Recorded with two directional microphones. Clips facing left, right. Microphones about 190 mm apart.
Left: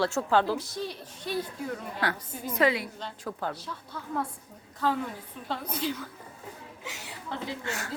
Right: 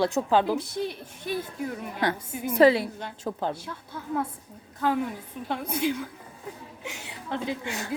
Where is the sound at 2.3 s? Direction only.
10° right (ahead or behind).